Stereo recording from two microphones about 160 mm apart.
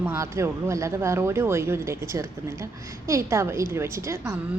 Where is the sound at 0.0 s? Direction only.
15° right (ahead or behind).